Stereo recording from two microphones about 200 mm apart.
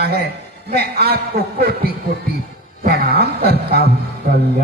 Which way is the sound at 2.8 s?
50° right (ahead or behind).